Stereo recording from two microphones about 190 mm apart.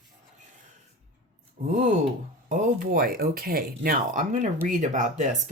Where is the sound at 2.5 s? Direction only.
45° right (ahead or behind).